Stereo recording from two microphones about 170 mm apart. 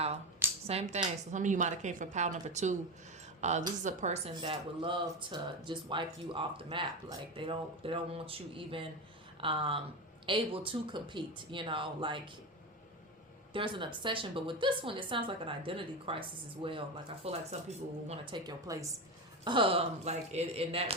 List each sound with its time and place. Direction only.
0.7 s a woman's voice: 40° right (ahead or behind)
4.4 s a woman's voice: 30° right (ahead or behind)
13.5 s a woman's voice: 30° right (ahead or behind)